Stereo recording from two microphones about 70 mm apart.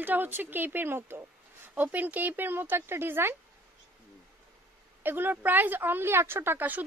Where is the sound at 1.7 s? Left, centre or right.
Right.